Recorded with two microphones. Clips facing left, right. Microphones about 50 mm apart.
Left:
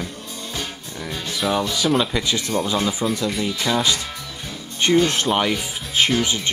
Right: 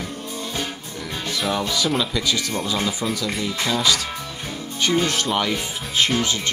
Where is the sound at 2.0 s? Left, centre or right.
Left.